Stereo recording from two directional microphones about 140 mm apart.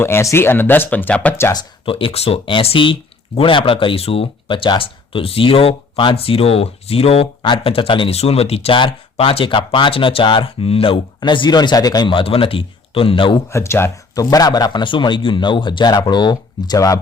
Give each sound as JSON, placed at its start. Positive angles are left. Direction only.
{"t": 0.0, "sound": "speech", "side_deg": 20}
{"t": 1.5, "sound": "speech", "side_deg": 40}
{"t": 13.5, "sound": "speech", "side_deg": 20}